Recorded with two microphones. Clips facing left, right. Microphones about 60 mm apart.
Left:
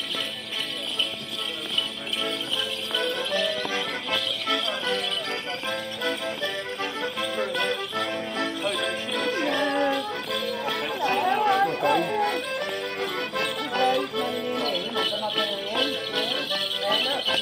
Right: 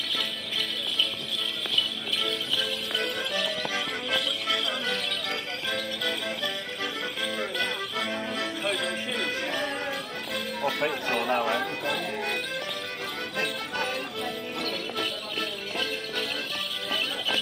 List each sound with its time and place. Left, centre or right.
3.3 s music: left
7.3 s music: left
11.0 s chatter: left
13.4 s music: left